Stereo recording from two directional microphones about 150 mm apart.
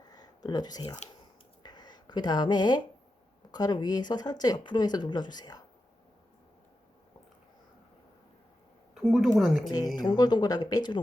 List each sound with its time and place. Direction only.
0.1 s a sound: 25° left (ahead or behind)
3.5 s speech: 25° left (ahead or behind)
9.0 s speech: centre (ahead or behind)
9.6 s speech: 25° left (ahead or behind)